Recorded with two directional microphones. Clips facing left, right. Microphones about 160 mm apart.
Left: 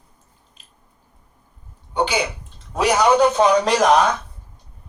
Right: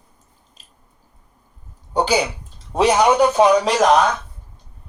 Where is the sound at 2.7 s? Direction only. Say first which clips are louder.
Right 3 dB; 25° right (ahead or behind).